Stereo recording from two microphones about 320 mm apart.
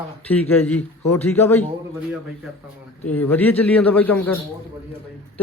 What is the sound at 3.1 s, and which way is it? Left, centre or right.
Speech, centre.